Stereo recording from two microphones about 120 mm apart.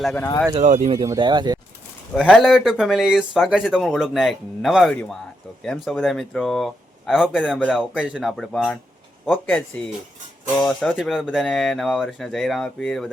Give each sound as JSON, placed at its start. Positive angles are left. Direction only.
{"t": 0.5, "sound": "speech", "side_deg": -85}
{"t": 0.9, "sound": "speech", "side_deg": -30}
{"t": 1.2, "sound": "speech", "side_deg": -40}
{"t": 2.1, "sound": "speech", "side_deg": 0}